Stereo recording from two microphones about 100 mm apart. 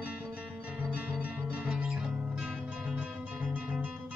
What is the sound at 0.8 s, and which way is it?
Music, 15° right (ahead or behind).